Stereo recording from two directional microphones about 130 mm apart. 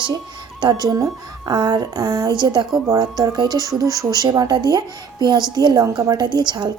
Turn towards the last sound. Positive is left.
turn(degrees=-35)  # may be behind; listen again after turning